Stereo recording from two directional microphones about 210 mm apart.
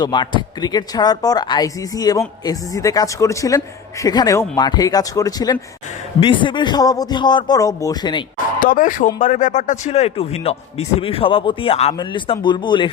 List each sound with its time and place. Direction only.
0.0 s a man's voice: 20° left (ahead or behind)
8.5 s a man's voice: 40° left (ahead or behind); by 12.9 s 20° left (ahead or behind)